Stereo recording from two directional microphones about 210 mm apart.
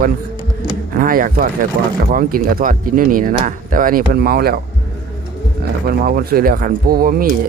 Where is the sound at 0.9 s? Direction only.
40° right (ahead or behind).